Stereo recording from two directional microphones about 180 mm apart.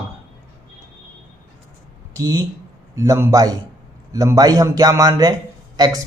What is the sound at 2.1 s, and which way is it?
A man's voice, 15° right (ahead or behind).